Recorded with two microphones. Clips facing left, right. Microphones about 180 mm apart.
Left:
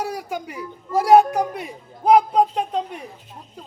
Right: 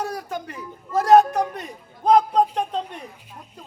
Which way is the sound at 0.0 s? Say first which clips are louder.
Left 1 dB; 10° left (ahead or behind).